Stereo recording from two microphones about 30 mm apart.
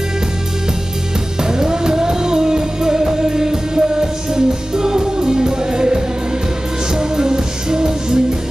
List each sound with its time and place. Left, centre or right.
1.5 s music: right